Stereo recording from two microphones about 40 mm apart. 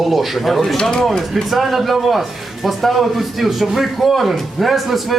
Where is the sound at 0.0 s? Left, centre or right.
Centre.